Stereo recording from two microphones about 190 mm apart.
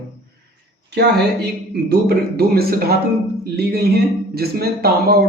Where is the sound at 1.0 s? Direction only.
60° right (ahead or behind).